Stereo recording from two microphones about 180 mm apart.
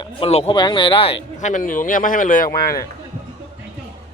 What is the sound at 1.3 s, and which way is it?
A man's voice, 45° left (ahead or behind).